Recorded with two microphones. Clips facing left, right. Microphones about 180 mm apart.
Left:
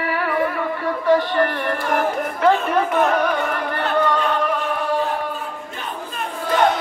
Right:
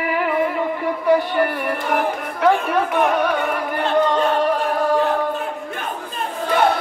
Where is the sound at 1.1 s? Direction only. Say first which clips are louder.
Even; 10° right (ahead or behind).